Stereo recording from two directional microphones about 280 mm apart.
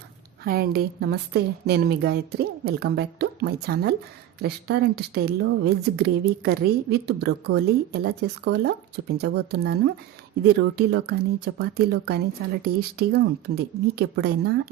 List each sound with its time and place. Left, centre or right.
0.4 s a woman's voice: right